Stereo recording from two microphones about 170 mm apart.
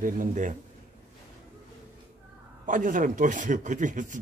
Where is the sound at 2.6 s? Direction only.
50° right (ahead or behind).